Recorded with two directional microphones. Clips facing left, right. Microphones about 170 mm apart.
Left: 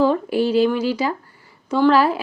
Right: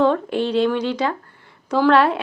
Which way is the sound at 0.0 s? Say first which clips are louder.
Left 1 dB; 5° left (ahead or behind).